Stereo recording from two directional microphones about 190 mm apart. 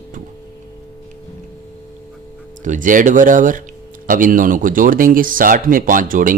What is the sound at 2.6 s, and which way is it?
Speech, 45° right (ahead or behind).